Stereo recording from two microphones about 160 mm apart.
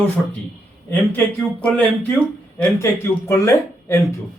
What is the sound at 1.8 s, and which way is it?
Speech, 10° left (ahead or behind).